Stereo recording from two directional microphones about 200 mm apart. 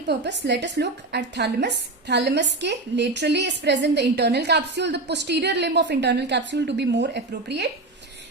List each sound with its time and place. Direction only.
0.1 s a woman's voice: 60° right (ahead or behind)